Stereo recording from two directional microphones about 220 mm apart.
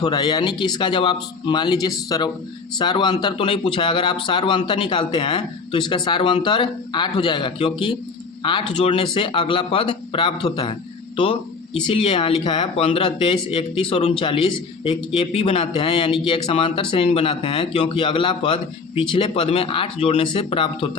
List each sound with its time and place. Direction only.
0.0 s speech: 20° left (ahead or behind)
11.2 s a sound: 25° left (ahead or behind)
11.9 s speech: 25° left (ahead or behind)